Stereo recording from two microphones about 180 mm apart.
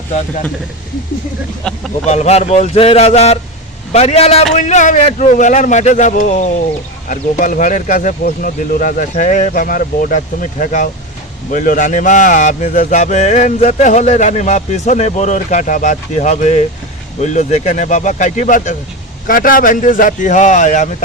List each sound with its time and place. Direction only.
1.6 s speech: 5° left (ahead or behind)
2.0 s speech: 40° left (ahead or behind)